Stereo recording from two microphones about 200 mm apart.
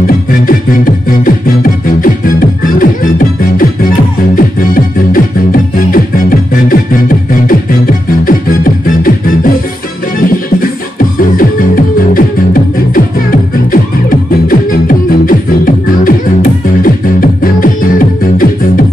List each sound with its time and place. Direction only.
0.0 s music: 45° left (ahead or behind)